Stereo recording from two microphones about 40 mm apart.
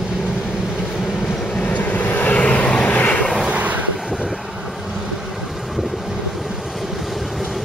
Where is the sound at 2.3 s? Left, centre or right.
Left.